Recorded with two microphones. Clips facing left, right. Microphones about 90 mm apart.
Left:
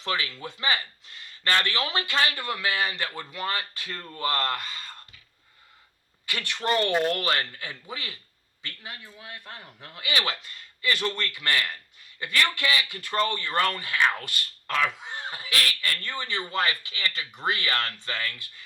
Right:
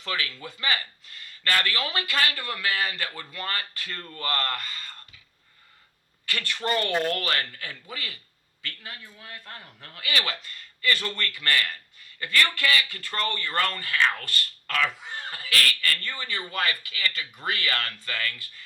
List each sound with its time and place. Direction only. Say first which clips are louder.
0.0 s speech: left 2 dB; 20° left (ahead or behind)
6.2 s speech: left 1 dB; 20° left (ahead or behind)